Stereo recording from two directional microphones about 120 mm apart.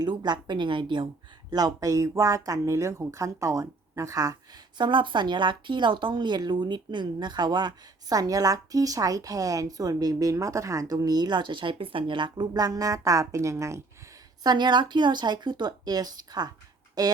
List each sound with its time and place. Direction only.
0.0 s a woman's voice: 35° right (ahead or behind)
1.5 s speech: 30° right (ahead or behind)
4.8 s a woman's voice: 40° right (ahead or behind); by 13.8 s 25° right (ahead or behind)
14.4 s a woman's voice: 40° right (ahead or behind)